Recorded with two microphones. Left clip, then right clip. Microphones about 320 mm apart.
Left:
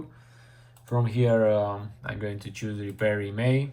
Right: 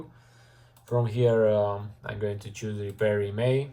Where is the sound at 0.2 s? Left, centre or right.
Centre.